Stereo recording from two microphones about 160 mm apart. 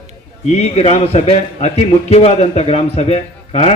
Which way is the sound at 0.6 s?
40° left (ahead or behind).